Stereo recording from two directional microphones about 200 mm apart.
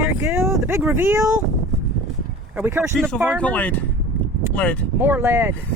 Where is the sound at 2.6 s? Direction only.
10° right (ahead or behind).